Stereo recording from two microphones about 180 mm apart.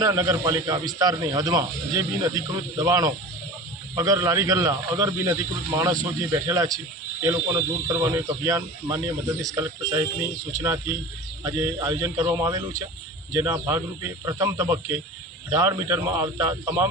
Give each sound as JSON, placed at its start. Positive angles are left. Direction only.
{"t": 0.0, "sound": "a man's voice", "side_deg": -20}